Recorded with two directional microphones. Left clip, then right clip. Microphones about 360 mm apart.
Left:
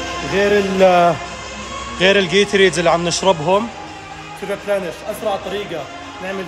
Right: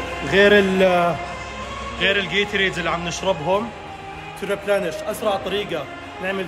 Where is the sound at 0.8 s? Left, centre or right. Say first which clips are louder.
Left 5 dB; centre.